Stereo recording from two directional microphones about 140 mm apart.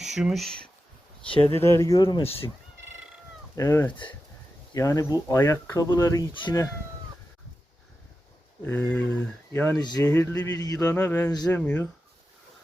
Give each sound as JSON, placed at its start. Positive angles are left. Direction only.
{"t": 0.0, "sound": "speech", "side_deg": -5}
{"t": 1.5, "sound": "speech", "side_deg": 20}
{"t": 2.0, "sound": "speech", "side_deg": 35}
{"t": 3.5, "sound": "speech", "side_deg": 25}
{"t": 8.6, "sound": "speech", "side_deg": 10}